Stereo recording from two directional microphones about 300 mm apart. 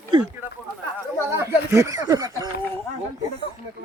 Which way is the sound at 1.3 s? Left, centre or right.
Centre.